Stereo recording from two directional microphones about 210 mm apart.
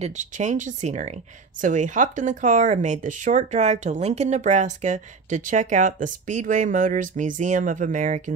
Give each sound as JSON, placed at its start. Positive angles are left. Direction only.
{"t": 0.0, "sound": "speech", "side_deg": -35}